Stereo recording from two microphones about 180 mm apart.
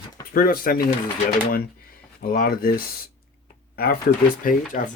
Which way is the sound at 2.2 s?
55° left (ahead or behind).